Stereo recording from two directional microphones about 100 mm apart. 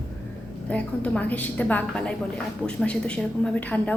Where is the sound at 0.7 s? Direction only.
10° left (ahead or behind).